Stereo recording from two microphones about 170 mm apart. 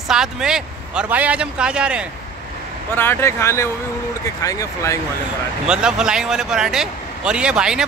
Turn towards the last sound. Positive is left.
turn(degrees=-5)  # may be behind; listen again after turning